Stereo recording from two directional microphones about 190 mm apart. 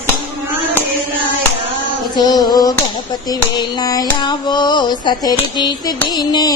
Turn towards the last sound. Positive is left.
turn(degrees=20)  # may be behind; listen again after turning